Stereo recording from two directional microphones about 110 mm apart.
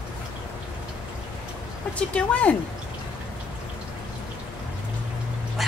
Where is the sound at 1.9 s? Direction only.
10° left (ahead or behind).